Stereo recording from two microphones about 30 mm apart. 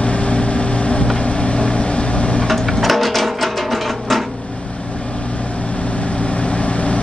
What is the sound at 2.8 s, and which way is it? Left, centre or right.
Music, centre.